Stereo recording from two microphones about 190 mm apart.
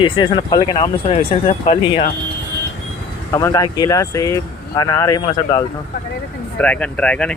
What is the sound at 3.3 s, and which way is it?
Speech, 20° left (ahead or behind).